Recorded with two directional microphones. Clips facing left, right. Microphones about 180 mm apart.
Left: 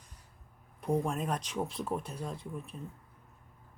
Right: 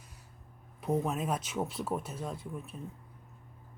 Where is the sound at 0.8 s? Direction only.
5° right (ahead or behind).